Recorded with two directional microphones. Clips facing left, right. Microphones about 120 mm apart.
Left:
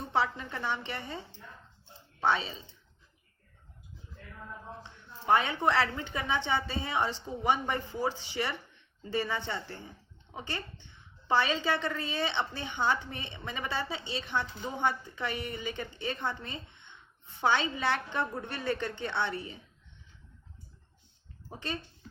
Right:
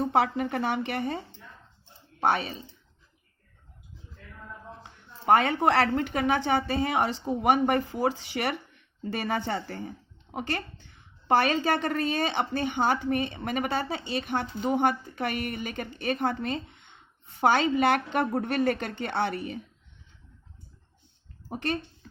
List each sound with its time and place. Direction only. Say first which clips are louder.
0.0 s a woman's voice: right 6 dB; 85° right
2.2 s a woman's voice: right 3 dB; 65° right (ahead or behind)
5.2 s a woman's voice: right 5 dB; 80° right
5.9 s a woman's voice: right 8 dB; 70° right (ahead or behind); by 10.6 s 90° right
11.3 s a woman's voice: right 5 dB; 70° right (ahead or behind)
21.6 s a woman's voice: right 7 dB; 75° right (ahead or behind)